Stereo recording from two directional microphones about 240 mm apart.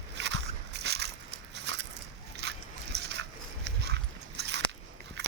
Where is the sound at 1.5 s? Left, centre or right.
Right.